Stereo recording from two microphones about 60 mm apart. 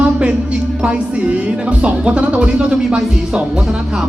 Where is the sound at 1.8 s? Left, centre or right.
Centre.